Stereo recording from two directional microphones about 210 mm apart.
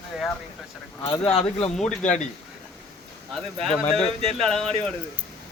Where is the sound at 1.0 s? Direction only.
15° left (ahead or behind).